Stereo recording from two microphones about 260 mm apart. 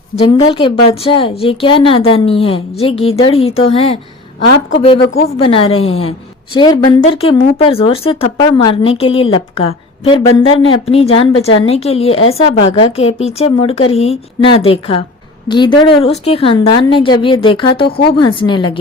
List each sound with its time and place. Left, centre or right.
0.2 s a woman's voice: centre
5.4 s a woman's voice: left
17.8 s speech: left
18.2 s speech: centre